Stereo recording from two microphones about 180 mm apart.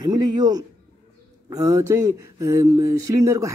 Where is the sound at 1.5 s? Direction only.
20° right (ahead or behind).